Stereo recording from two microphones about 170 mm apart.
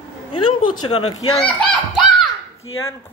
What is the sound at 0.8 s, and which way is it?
Speech, 35° left (ahead or behind).